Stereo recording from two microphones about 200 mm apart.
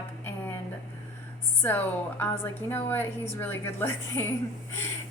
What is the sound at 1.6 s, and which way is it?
A woman's voice, 10° left (ahead or behind).